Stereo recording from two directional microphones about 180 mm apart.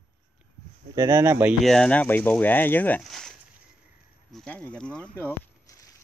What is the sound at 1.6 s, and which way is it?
Speech, 5° left (ahead or behind).